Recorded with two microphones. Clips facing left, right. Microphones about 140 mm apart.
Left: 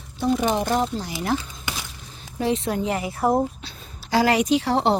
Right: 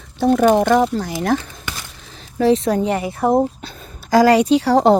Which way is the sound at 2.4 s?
35° right (ahead or behind).